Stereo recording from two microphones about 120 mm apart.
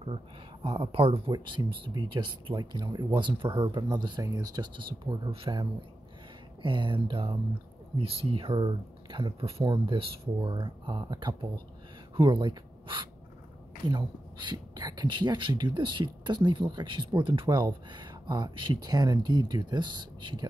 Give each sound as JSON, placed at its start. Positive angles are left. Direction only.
{"t": 0.7, "sound": "speech", "side_deg": -50}
{"t": 1.3, "sound": "speech", "side_deg": -40}